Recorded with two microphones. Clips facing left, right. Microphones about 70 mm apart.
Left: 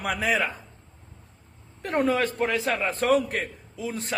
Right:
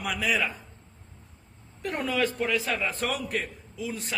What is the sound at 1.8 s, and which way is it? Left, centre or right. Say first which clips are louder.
A man's voice: left 4 dB; left.